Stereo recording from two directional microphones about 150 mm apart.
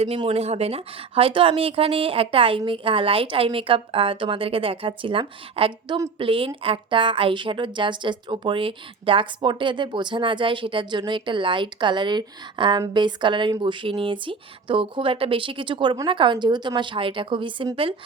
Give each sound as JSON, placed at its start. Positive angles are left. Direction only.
{"t": 0.2, "sound": "a woman's voice", "side_deg": -40}